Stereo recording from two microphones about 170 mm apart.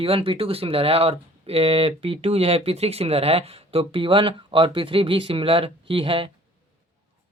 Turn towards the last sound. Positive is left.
turn(degrees=-30)  # may be behind; listen again after turning